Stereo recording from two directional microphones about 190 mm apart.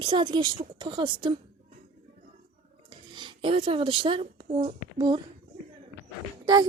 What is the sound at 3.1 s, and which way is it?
Speech, 25° right (ahead or behind).